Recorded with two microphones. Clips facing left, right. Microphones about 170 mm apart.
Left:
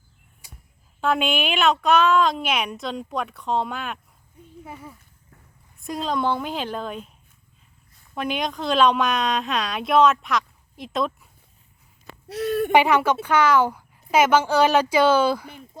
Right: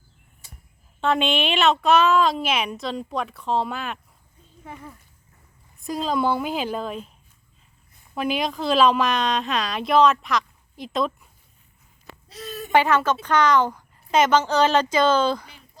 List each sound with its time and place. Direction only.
0.4 s a sound: 10° left (ahead or behind)
1.0 s speech: centre (ahead or behind)
8.1 s speech: 5° right (ahead or behind)
12.3 s speech: 65° left (ahead or behind)
12.7 s speech: 15° left (ahead or behind)
15.4 s a sound: 50° left (ahead or behind)